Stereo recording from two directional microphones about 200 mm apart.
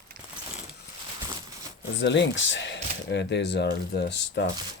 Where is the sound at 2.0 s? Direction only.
65° left (ahead or behind).